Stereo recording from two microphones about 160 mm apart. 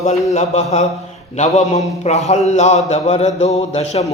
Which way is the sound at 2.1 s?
45° left (ahead or behind).